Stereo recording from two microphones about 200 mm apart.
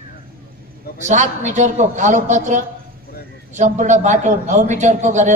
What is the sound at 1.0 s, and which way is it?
A man's voice, 35° right (ahead or behind).